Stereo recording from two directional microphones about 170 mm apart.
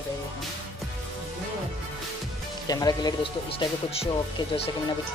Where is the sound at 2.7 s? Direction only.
25° left (ahead or behind).